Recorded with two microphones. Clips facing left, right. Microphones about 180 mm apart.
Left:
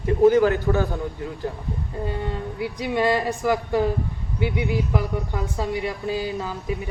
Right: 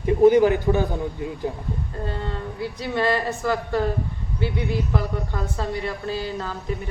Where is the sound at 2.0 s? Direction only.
15° left (ahead or behind).